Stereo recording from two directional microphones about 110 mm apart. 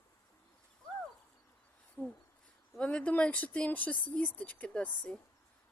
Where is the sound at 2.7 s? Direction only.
10° left (ahead or behind).